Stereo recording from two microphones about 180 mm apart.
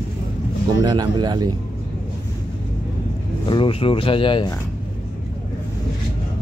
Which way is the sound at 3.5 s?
30° left (ahead or behind).